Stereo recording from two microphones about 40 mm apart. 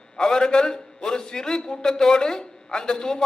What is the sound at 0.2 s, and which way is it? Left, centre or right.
A man's voice, centre.